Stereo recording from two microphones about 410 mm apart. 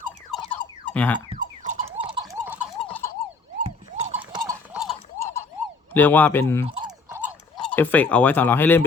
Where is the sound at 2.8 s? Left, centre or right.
Centre.